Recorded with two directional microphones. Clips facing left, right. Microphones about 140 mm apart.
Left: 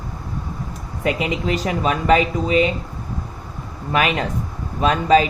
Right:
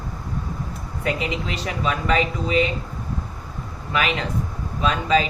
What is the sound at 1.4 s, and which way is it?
Speech, 40° left (ahead or behind).